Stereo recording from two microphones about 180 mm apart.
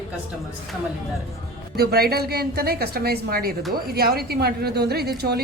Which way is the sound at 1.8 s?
60° right (ahead or behind).